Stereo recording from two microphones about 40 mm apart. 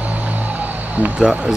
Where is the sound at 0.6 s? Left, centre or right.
Right.